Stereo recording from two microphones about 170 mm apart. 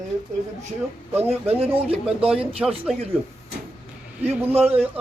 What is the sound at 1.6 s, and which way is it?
Speech, 35° right (ahead or behind).